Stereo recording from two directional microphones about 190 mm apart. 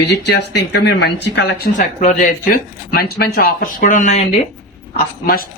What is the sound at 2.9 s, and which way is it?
Speech, 55° left (ahead or behind).